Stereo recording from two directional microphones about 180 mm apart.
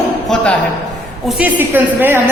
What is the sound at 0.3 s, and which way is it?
A woman's voice, 5° left (ahead or behind).